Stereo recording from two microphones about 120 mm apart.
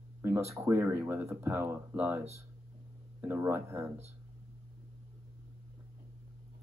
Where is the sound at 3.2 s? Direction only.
15° right (ahead or behind).